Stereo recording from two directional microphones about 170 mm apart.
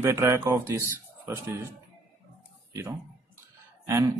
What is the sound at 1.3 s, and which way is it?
Speech, 15° right (ahead or behind).